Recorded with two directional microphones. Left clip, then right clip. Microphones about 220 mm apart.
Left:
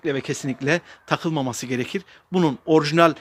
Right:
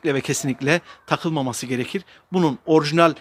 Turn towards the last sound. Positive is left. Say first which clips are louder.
# even
turn(degrees=0)  # may be behind; listen again after turning